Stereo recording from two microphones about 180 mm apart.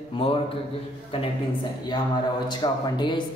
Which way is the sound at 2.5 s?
25° left (ahead or behind).